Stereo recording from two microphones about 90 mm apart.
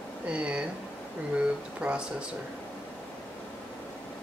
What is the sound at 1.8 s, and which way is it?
Speech, 15° right (ahead or behind).